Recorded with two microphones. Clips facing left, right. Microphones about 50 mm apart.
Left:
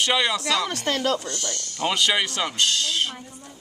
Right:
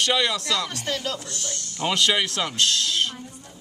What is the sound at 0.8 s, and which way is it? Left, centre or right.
Speech, left.